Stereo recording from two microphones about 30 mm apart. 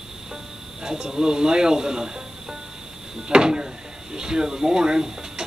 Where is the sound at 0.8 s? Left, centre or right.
Right.